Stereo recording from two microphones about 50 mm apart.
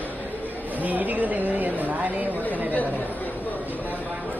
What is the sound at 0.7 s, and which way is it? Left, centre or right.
Speech, right.